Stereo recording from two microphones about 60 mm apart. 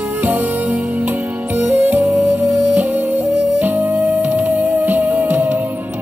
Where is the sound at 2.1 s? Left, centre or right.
Right.